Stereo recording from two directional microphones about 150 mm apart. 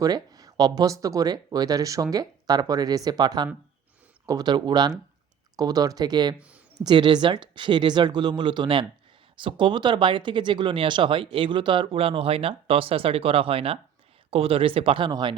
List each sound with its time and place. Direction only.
0.0 s speech: 25° right (ahead or behind)